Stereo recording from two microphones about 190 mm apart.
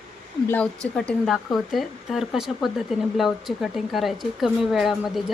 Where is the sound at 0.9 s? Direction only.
5° left (ahead or behind).